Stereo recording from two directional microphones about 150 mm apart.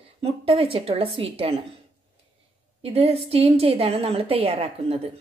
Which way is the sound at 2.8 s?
45° right (ahead or behind).